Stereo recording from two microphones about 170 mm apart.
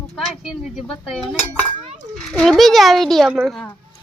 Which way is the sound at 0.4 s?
Centre (ahead or behind).